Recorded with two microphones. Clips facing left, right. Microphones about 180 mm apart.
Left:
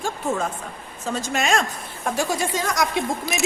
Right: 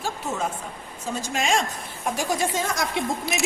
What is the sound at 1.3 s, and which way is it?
Speech, 70° left (ahead or behind).